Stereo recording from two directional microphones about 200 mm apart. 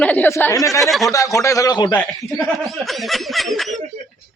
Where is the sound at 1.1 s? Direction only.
15° left (ahead or behind).